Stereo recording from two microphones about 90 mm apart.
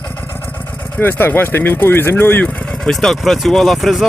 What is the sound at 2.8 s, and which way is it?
Speech, 5° left (ahead or behind).